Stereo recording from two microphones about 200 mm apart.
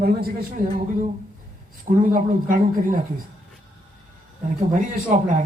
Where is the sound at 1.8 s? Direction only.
40° right (ahead or behind).